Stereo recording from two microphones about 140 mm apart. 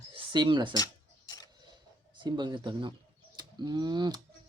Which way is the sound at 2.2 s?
30° right (ahead or behind).